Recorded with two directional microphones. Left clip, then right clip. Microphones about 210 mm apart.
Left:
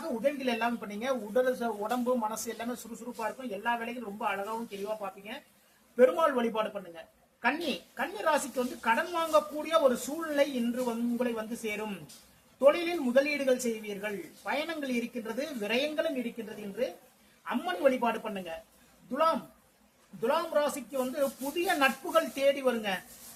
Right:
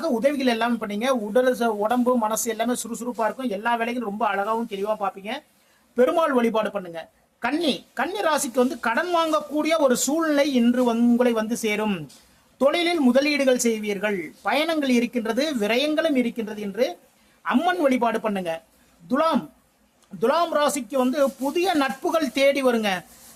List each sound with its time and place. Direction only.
0.2 s speech: 40° right (ahead or behind)
17.4 s speech: 45° right (ahead or behind)